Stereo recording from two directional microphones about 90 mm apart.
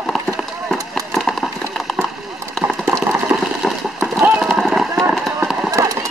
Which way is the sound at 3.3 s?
10° right (ahead or behind).